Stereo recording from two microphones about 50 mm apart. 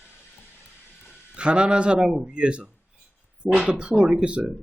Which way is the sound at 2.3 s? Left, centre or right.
Right.